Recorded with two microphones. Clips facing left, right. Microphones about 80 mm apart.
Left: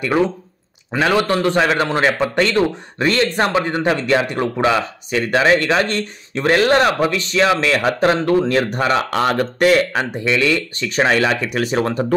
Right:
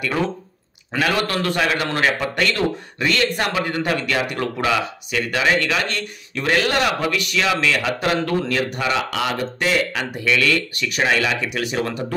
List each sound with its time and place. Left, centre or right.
0.9 s a man's voice: left
9.9 s a man's voice: left